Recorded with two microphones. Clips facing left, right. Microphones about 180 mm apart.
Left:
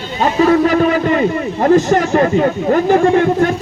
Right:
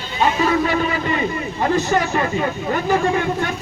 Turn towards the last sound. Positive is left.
turn(degrees=40)  # may be behind; listen again after turning